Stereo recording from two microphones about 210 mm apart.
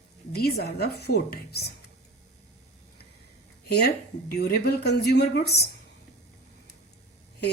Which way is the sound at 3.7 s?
50° left (ahead or behind).